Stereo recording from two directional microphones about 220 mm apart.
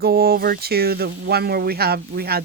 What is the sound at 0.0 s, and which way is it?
Speech, 45° right (ahead or behind).